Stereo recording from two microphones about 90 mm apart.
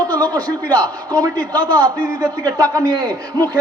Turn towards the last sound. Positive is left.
turn(degrees=-45)  # may be behind; listen again after turning